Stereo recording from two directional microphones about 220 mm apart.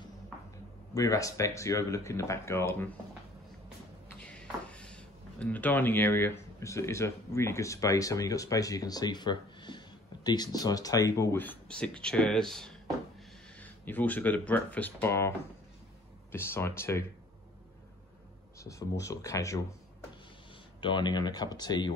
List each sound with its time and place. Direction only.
0.9 s speech: 15° left (ahead or behind)
4.2 s speech: 5° left (ahead or behind)
13.6 s a sound: 10° left (ahead or behind)
14.5 s speech: 10° left (ahead or behind)
18.6 s speech: 15° left (ahead or behind)
20.8 s speech: 20° left (ahead or behind)